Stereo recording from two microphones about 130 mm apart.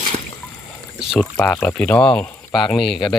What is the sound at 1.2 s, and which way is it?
Speech, 10° left (ahead or behind).